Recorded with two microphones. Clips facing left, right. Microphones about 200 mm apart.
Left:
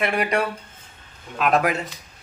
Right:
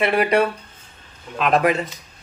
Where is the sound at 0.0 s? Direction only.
30° right (ahead or behind).